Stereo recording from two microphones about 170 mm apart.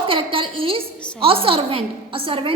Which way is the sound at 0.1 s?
30° right (ahead or behind).